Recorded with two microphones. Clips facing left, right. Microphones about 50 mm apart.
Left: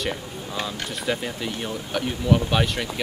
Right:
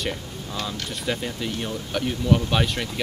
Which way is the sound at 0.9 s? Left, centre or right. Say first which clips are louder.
Left 1 dB; centre.